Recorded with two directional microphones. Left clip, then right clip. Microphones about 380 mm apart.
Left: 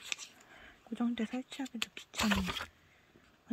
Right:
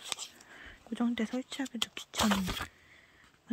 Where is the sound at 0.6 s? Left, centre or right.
Centre.